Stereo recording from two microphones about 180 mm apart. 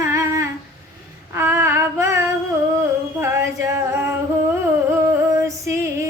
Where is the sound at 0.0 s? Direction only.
15° right (ahead or behind).